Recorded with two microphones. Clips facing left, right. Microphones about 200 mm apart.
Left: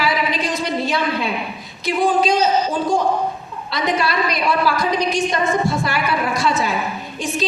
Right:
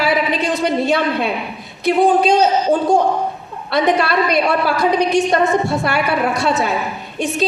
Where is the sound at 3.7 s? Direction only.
65° right (ahead or behind).